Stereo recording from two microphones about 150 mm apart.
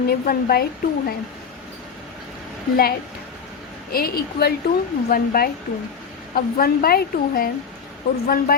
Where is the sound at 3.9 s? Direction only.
90° left.